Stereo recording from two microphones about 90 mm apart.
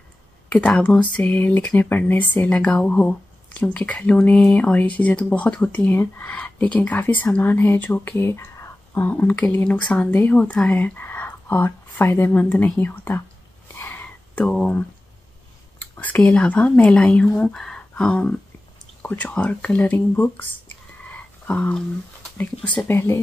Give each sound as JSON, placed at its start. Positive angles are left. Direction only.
{"t": 0.5, "sound": "speech", "side_deg": 10}
{"t": 13.7, "sound": "whispering", "side_deg": 30}
{"t": 14.3, "sound": "speech", "side_deg": 10}
{"t": 21.5, "sound": "speech", "side_deg": 20}
{"t": 22.8, "sound": "speech", "side_deg": 25}